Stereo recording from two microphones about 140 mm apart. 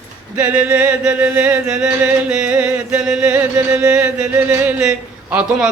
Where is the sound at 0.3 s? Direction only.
10° right (ahead or behind).